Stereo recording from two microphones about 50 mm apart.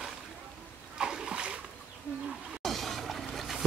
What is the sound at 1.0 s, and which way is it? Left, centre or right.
Splash, centre.